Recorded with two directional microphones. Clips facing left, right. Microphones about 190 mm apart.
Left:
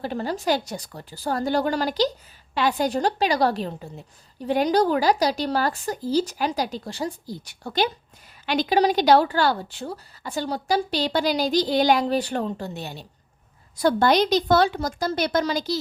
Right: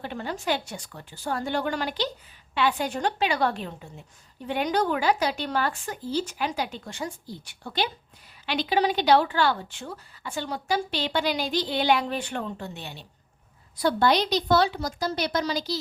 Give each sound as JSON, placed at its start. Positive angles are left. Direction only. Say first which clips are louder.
{"t": 0.0, "sound": "a woman's voice", "louder": "left 5 dB", "side_deg": 35}